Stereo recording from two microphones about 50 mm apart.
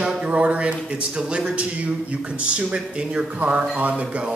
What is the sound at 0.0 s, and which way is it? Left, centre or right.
Speech, centre.